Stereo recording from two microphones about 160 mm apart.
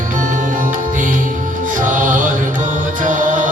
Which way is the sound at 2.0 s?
55° right (ahead or behind).